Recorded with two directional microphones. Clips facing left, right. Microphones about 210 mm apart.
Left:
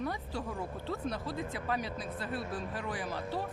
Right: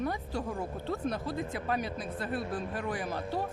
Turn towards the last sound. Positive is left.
turn(degrees=-50)  # may be behind; listen again after turning